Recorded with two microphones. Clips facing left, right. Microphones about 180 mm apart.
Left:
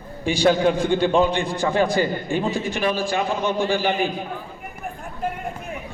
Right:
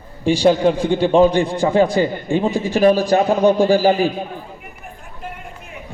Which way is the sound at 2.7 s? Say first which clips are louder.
Right 9 dB; 40° right (ahead or behind).